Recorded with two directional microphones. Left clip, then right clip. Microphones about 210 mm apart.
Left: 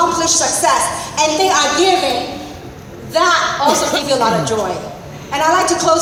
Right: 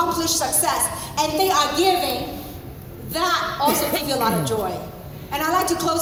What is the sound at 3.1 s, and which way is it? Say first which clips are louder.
Speech: left 9 dB; 35° right (ahead or behind).